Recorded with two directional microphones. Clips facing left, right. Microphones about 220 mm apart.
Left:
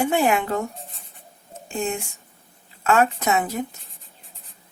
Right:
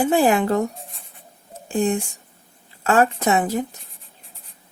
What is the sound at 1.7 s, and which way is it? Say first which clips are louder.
Speech: right 6 dB; 35° right (ahead or behind).